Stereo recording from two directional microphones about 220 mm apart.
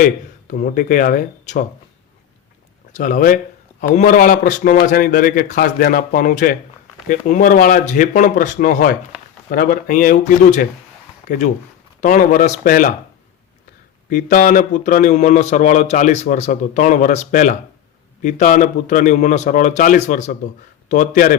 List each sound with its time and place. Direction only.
0.0 s a man's voice: 35° left (ahead or behind)
2.9 s a man's voice: 35° left (ahead or behind)
14.1 s a man's voice: 40° left (ahead or behind)